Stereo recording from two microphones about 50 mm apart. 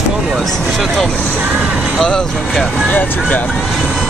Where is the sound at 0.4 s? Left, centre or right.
Centre.